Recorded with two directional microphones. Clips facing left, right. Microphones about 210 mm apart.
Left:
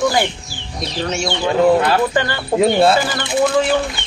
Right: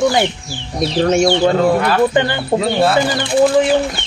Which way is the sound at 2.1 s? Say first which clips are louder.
Right 4 dB; 20° right (ahead or behind).